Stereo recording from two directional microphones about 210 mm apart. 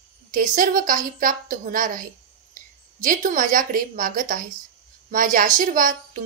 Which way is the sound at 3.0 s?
40° right (ahead or behind).